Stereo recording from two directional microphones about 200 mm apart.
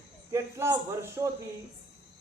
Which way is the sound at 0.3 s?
15° right (ahead or behind).